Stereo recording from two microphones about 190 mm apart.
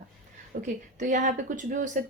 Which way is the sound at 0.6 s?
40° right (ahead or behind).